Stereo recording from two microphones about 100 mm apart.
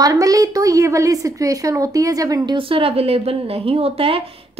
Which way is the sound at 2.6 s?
65° right (ahead or behind).